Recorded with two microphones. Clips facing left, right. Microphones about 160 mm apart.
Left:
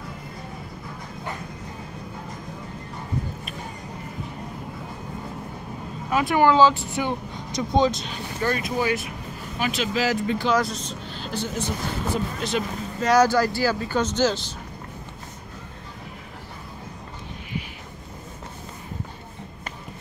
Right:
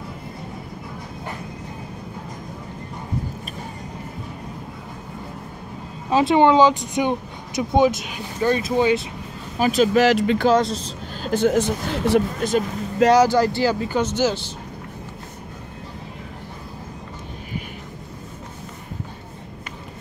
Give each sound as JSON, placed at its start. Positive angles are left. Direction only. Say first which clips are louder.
{"t": 6.0, "sound": "speech", "louder": "right 4 dB", "side_deg": -25}
{"t": 8.7, "sound": "speech", "louder": "right 6 dB", "side_deg": -25}
{"t": 9.6, "sound": "speech", "louder": "right 7 dB", "side_deg": -40}
{"t": 9.9, "sound": "speech", "louder": "right 7 dB", "side_deg": -80}
{"t": 10.5, "sound": "speech", "louder": "right 4 dB", "side_deg": -30}
{"t": 11.2, "sound": "speech", "louder": "right 12 dB", "side_deg": -50}
{"t": 11.5, "sound": "speech", "louder": "right 7 dB", "side_deg": -90}
{"t": 12.4, "sound": "speech", "louder": "right 5 dB", "side_deg": -45}
{"t": 13.1, "sound": "speech", "louder": "even", "side_deg": -20}